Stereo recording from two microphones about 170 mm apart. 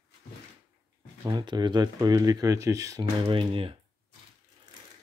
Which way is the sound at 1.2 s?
25° right (ahead or behind).